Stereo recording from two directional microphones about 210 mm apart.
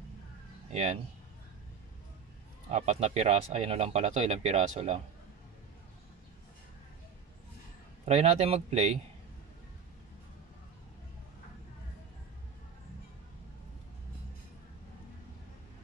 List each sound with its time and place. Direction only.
0.7 s speech: 30° right (ahead or behind)
2.7 s speech: 30° right (ahead or behind)
8.0 s speech: 30° right (ahead or behind)